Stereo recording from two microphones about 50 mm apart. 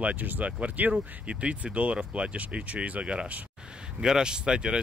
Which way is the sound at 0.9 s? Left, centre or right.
Right.